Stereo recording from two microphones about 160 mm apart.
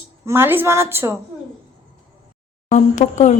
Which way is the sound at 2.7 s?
45° left (ahead or behind).